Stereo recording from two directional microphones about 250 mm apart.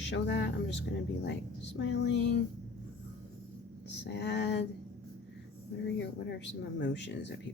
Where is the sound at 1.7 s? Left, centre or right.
Left.